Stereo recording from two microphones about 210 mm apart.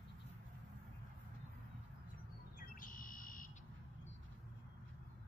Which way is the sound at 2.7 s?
40° left (ahead or behind).